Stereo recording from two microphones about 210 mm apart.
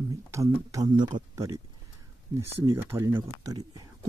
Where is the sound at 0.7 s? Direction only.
15° right (ahead or behind).